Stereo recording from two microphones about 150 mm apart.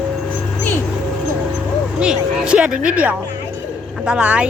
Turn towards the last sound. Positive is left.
turn(degrees=-10)  # may be behind; listen again after turning